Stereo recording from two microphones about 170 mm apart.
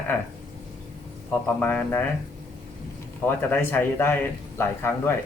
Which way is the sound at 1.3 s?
10° left (ahead or behind).